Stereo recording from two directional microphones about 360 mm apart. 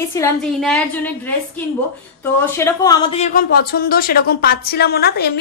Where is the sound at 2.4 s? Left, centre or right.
Centre.